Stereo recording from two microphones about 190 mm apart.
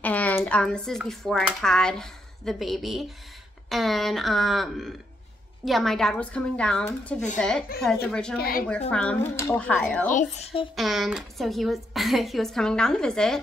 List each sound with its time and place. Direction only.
0.0 s a sound: 10° left (ahead or behind)
0.4 s speech: 5° left (ahead or behind)
8.4 s a woman's voice: 50° left (ahead or behind)
8.9 s speech: 5° left (ahead or behind)
10.1 s speech: 35° left (ahead or behind)
10.8 s speech: centre (ahead or behind)